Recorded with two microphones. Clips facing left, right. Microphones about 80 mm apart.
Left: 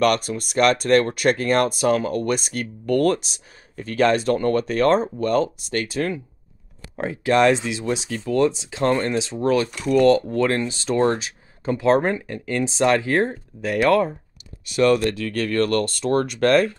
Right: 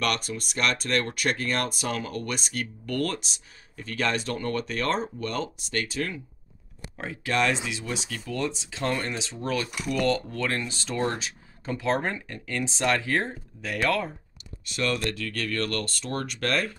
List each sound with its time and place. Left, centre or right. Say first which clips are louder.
0.0 s speech: left 9 dB; left
8.8 s speech: left 9 dB; left
10.0 s speech: left 9 dB; left